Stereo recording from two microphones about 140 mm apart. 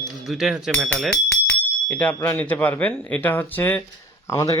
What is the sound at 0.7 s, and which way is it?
Speech, 10° left (ahead or behind).